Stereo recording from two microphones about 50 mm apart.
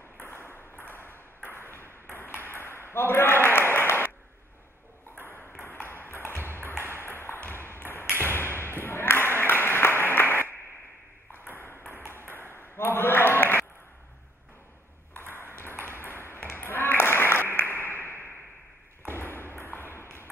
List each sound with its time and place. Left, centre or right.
0.2 s ping: left
5.6 s ping: left
7.0 s a sound: left
7.4 s ping: left
8.3 s a sound: left
11.3 s ping: left
12.4 s a sound: left
15.1 s ping: left
16.3 s applause: left
19.1 s ping: left